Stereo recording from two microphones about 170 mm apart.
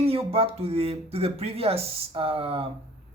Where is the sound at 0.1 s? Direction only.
35° right (ahead or behind).